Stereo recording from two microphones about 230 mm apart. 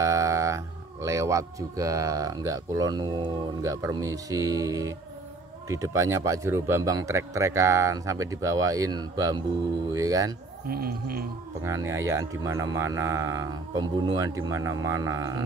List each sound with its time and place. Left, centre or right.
0.0 s a sound: centre
1.0 s speech: centre
10.7 s whale vocalization: right
11.6 s speech: centre